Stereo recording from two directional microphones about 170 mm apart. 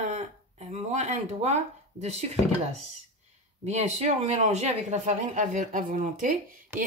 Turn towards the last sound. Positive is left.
turn(degrees=-15)  # may be behind; listen again after turning